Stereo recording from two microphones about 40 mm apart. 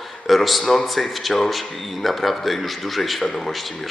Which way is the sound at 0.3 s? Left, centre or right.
Centre.